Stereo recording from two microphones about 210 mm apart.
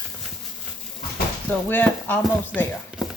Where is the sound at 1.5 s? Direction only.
10° left (ahead or behind).